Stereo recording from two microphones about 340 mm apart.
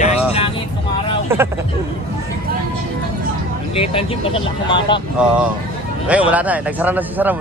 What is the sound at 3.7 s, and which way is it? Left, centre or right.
Speech, centre.